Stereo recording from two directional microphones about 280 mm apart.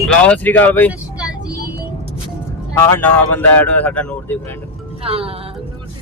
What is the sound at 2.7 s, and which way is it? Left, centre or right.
Speech, centre.